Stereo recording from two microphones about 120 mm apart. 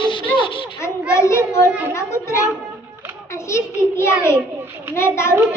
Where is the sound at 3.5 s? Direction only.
25° left (ahead or behind).